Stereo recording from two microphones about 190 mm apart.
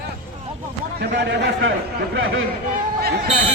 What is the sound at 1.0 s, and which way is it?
Speech, 60° right (ahead or behind).